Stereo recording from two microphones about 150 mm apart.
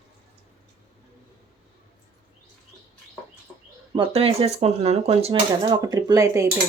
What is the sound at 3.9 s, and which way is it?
Speech, 40° right (ahead or behind).